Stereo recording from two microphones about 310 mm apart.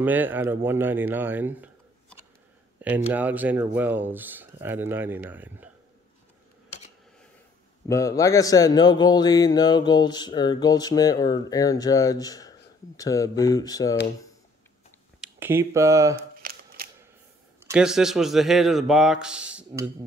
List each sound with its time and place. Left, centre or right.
0.0 s speech: centre
7.9 s speech: centre
15.1 s speech: centre
16.2 s a sound: right
17.6 s a man's voice: centre